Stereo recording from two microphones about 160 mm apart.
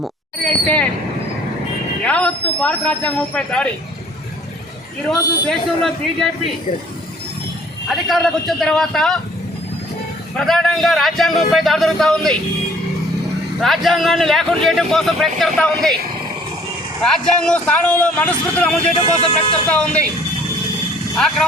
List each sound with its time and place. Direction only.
0.0 s speech: 5° left (ahead or behind)
2.0 s speech: 5° left (ahead or behind)
5.0 s a man's voice: centre (ahead or behind)
7.9 s a man's voice: centre (ahead or behind)
10.3 s a man's voice: centre (ahead or behind)
13.6 s a man's voice: centre (ahead or behind)
17.0 s speech: 5° left (ahead or behind)
18.9 s speech: 35° left (ahead or behind)
19.7 s speech: 10° left (ahead or behind)
21.2 s a man's voice: centre (ahead or behind)